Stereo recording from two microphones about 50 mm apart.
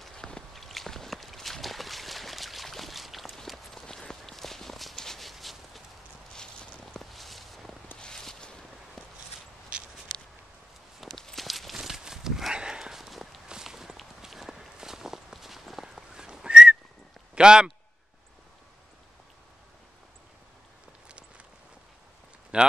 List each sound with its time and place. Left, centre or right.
0.0 s walk: centre
3.4 s a sound: centre
3.8 s walk: centre
6.3 s walk: centre
8.0 s a sound: centre
11.0 s a sound: centre
11.2 s walk: centre
11.7 s walk: centre
17.4 s a man's voice: centre
22.5 s speech: right